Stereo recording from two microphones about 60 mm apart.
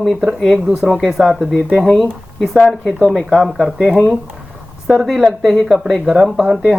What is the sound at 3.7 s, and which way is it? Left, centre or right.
Speech, centre.